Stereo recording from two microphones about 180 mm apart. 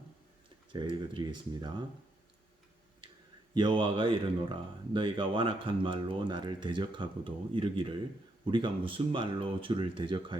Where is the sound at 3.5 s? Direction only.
25° right (ahead or behind).